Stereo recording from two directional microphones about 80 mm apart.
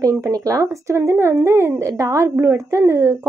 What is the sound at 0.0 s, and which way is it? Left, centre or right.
A woman's voice, right.